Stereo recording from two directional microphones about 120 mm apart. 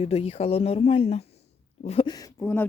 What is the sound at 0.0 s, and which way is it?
Speech, 55° left (ahead or behind).